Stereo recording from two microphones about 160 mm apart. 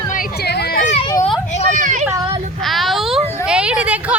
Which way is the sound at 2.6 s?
Centre (ahead or behind).